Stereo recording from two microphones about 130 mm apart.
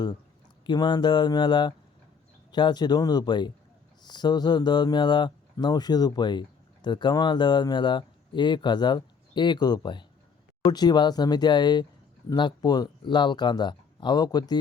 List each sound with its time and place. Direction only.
0.6 s speech: 35° left (ahead or behind)